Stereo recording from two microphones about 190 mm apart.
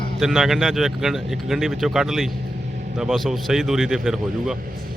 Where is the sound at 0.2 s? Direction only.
Centre (ahead or behind).